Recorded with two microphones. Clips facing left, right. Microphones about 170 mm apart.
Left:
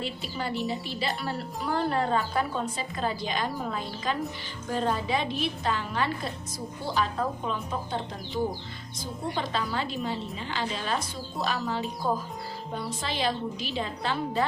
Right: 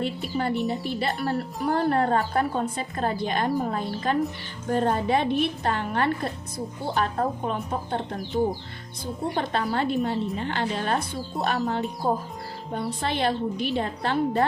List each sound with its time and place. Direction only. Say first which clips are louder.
0.0 s a woman's voice: right 6 dB; 55° right (ahead or behind)
9.3 s a woman's voice: right 4 dB; 55° right (ahead or behind)
12.0 s a woman's voice: right 3 dB; 45° right (ahead or behind)
12.7 s a woman's voice: right 5 dB; 60° right (ahead or behind)